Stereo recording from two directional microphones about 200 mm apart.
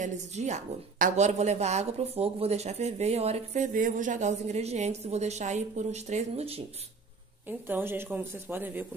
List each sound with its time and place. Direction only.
0.0 s a woman's voice: 35° right (ahead or behind)
7.4 s speech: 10° right (ahead or behind)